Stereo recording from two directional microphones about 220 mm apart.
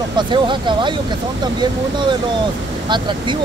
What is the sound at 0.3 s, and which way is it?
Speech, 20° right (ahead or behind).